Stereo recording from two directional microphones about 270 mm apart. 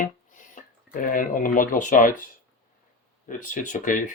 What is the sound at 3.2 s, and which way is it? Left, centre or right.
Speech, left.